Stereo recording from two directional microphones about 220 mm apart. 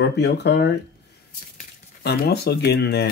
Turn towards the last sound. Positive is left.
turn(degrees=50)  # may be behind; listen again after turning